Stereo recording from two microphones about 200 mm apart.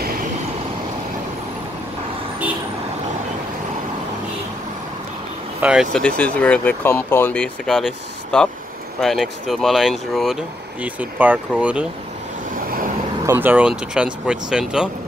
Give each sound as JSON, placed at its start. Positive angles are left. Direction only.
{"t": 0.0, "sound": "vehicle", "side_deg": -45}
{"t": 5.6, "sound": "speech", "side_deg": -5}
{"t": 13.2, "sound": "speech", "side_deg": -10}